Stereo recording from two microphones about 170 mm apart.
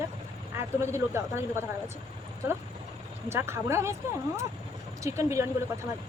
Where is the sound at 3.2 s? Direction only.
15° right (ahead or behind).